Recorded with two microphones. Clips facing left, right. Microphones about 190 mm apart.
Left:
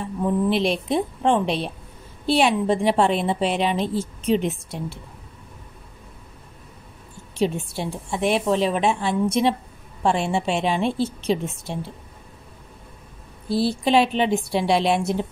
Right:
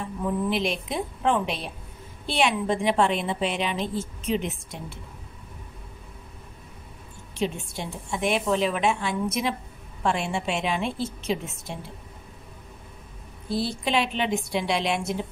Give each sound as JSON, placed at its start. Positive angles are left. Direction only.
{"t": 0.5, "sound": "a woman's voice", "side_deg": 35}
{"t": 7.3, "sound": "a woman's voice", "side_deg": 35}
{"t": 13.5, "sound": "a woman's voice", "side_deg": 35}